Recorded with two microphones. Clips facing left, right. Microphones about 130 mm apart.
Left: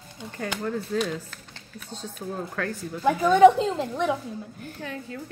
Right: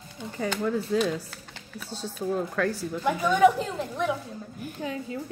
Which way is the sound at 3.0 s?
25° left (ahead or behind).